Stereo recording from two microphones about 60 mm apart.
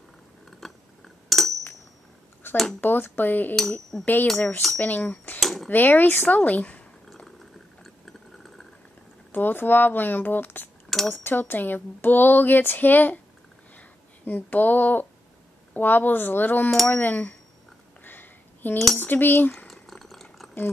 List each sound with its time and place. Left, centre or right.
0.5 s a sound: centre
2.5 s speech: centre
2.8 s speech: left
5.4 s cutlery: centre
5.7 s speech: left
9.3 s speech: left
10.9 s speech: centre
11.2 s speech: left
13.7 s a sound: left
15.7 s speech: left
18.0 s a sound: left
18.9 s speech: left
19.7 s a sound: centre